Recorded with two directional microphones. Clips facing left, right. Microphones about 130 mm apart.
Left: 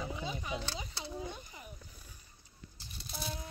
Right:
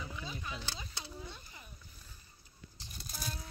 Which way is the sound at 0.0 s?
25° left (ahead or behind).